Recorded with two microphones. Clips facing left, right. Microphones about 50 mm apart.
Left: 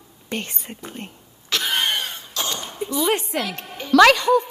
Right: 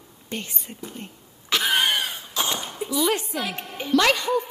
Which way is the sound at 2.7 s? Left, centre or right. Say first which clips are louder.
Left 2 dB; centre.